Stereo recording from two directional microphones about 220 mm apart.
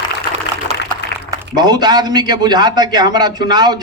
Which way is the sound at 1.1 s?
50° left (ahead or behind).